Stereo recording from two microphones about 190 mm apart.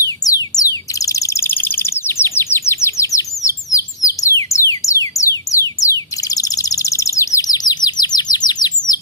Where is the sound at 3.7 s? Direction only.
15° left (ahead or behind).